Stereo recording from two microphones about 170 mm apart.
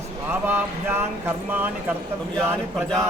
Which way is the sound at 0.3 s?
10° right (ahead or behind).